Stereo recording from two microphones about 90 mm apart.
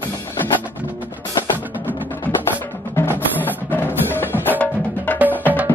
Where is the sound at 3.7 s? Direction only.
20° left (ahead or behind).